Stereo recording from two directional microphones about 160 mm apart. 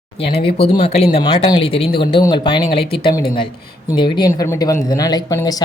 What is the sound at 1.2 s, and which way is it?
Speech, 30° left (ahead or behind).